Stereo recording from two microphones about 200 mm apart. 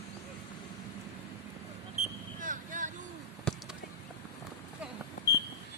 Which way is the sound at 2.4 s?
40° right (ahead or behind).